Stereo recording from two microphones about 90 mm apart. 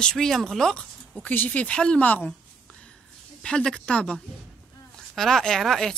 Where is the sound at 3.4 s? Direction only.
10° left (ahead or behind).